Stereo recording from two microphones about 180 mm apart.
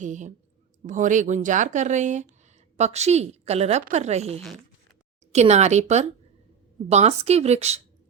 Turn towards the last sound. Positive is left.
turn(degrees=-35)  # may be behind; listen again after turning